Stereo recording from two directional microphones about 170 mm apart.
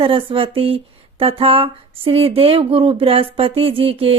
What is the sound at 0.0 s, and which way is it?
Speech, 30° right (ahead or behind).